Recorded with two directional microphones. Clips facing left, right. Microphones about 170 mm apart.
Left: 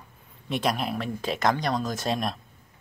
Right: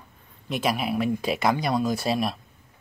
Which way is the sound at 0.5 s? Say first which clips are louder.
Right 1 dB; 5° right (ahead or behind).